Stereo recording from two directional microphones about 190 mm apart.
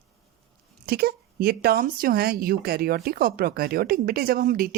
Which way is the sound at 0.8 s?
55° right (ahead or behind).